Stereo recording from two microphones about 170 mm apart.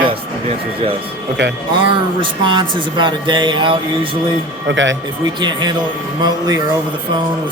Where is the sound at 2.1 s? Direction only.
30° right (ahead or behind).